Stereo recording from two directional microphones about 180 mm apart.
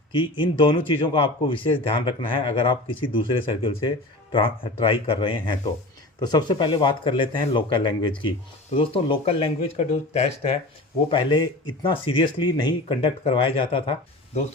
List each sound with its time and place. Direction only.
0.1 s speech: 25° left (ahead or behind)
11.1 s speech: 25° left (ahead or behind)